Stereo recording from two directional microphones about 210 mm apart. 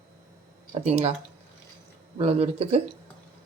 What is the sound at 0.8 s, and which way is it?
Speech, 30° right (ahead or behind).